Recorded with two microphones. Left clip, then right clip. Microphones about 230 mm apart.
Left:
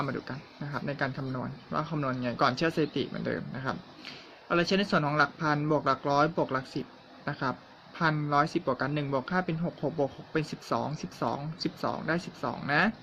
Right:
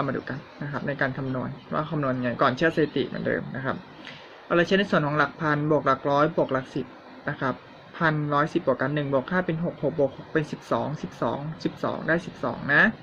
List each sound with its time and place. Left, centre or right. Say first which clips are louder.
0.0 s speech: right 5 dB; centre